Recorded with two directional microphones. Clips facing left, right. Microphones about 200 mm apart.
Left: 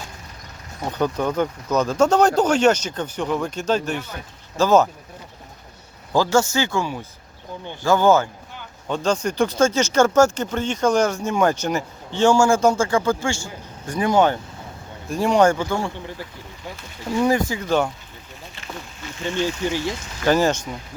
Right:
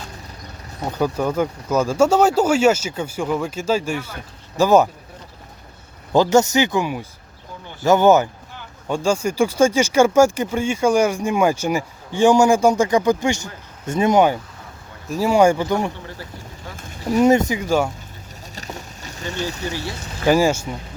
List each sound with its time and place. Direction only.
0.9 s speech: 10° right (ahead or behind)
6.1 s speech: 20° right (ahead or behind)
9.0 s speech: 10° right (ahead or behind)
15.1 s speech: 5° right (ahead or behind)
17.1 s speech: 20° right (ahead or behind)
17.6 s speech: 10° right (ahead or behind)
19.3 s speech: 40° right (ahead or behind)
19.7 s speech: 20° left (ahead or behind)
20.2 s speech: 10° right (ahead or behind)